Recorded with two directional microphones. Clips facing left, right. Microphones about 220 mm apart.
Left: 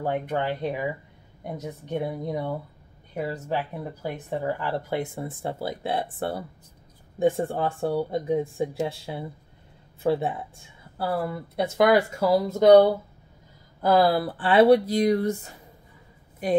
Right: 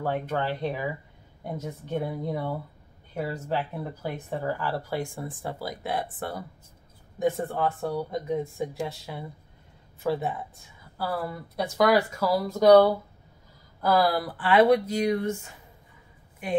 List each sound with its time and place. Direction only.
0.0 s a woman's voice: 15° left (ahead or behind); by 16.6 s 35° left (ahead or behind)